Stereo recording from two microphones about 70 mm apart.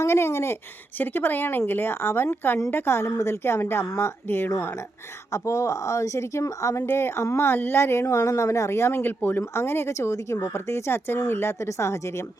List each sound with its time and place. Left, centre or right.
0.0 s speech: left
0.9 s speech: left
5.3 s speech: left
6.8 s speech: left